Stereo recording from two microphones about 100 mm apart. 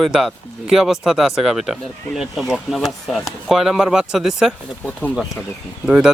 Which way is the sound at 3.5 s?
Centre (ahead or behind).